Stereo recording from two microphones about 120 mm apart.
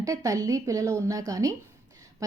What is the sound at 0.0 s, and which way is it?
A woman's voice, 30° right (ahead or behind).